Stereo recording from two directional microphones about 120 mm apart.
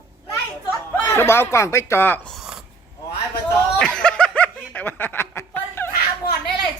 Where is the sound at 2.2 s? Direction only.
Centre (ahead or behind).